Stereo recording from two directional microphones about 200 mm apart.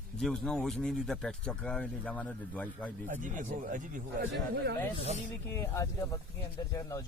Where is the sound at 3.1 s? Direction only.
40° right (ahead or behind).